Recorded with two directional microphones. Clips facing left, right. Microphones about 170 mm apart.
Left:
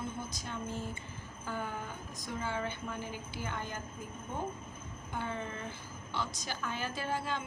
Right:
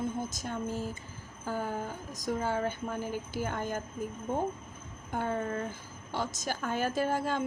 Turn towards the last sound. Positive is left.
turn(degrees=-45)  # may be behind; listen again after turning